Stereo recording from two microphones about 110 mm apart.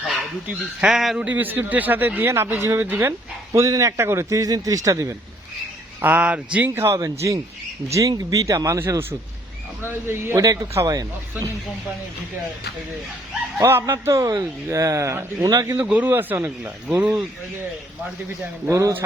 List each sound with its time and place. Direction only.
0.4 s a man's voice: 10° right (ahead or behind); by 5.1 s 30° right (ahead or behind)
6.0 s speech: 15° right (ahead or behind)
6.7 s a man's voice: 25° right (ahead or behind)
13.6 s a man's voice: 25° right (ahead or behind)
15.7 s speech: 15° right (ahead or behind)
18.7 s a man's voice: 30° right (ahead or behind)